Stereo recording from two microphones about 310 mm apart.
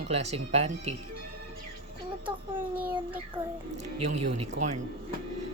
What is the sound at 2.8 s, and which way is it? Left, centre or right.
Speech, centre.